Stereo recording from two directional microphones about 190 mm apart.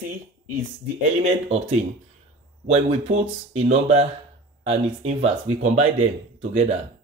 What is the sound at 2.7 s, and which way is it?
Speech, 35° right (ahead or behind).